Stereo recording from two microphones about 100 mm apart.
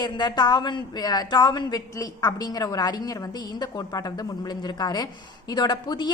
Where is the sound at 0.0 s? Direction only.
45° left (ahead or behind).